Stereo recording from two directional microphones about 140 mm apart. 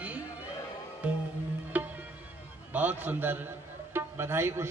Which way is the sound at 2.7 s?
10° right (ahead or behind).